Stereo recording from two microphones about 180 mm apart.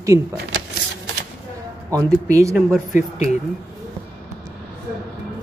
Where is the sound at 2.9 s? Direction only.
40° left (ahead or behind).